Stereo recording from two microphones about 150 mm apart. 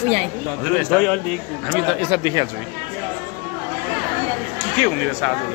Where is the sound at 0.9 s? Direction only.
5° left (ahead or behind).